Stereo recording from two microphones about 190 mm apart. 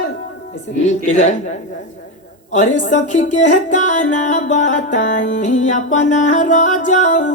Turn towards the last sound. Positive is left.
turn(degrees=40)  # may be behind; listen again after turning